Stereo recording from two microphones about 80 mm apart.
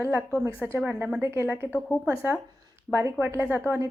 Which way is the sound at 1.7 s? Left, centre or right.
Centre.